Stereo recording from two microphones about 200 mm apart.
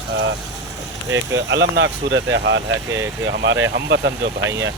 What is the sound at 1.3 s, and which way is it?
Speech, 65° right (ahead or behind).